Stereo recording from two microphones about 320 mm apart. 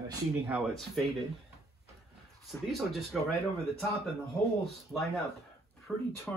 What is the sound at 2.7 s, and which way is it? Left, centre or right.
Speech, centre.